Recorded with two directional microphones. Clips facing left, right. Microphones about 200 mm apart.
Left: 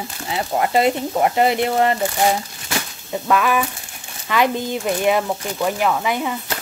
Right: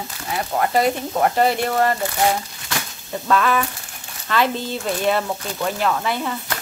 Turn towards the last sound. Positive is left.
turn(degrees=10)  # may be behind; listen again after turning